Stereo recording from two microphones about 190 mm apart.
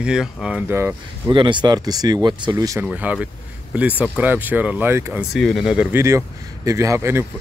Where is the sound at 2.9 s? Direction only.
5° right (ahead or behind).